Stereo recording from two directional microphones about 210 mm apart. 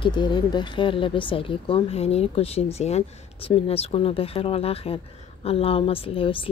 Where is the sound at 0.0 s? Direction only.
20° left (ahead or behind).